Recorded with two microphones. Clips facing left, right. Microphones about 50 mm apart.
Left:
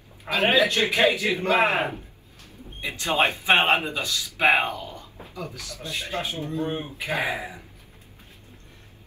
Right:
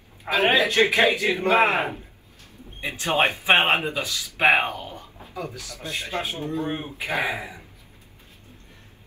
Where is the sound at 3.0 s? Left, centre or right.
Right.